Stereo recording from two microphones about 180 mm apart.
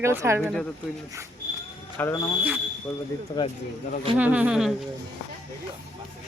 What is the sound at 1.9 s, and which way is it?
Speech, 15° left (ahead or behind).